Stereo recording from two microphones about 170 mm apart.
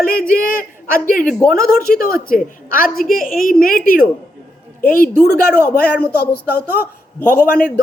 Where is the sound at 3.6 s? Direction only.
55° left (ahead or behind).